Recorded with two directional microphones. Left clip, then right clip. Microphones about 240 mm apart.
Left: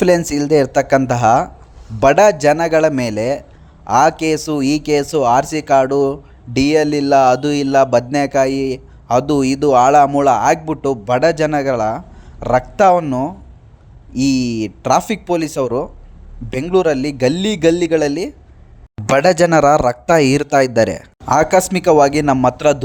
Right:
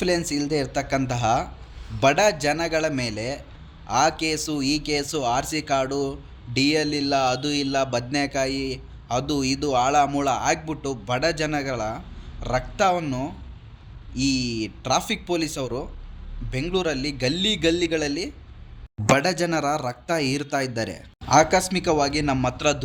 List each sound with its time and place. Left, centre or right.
0.3 s speech: left